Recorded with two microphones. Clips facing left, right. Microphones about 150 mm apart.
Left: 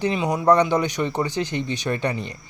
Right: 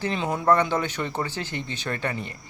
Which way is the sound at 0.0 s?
15° left (ahead or behind).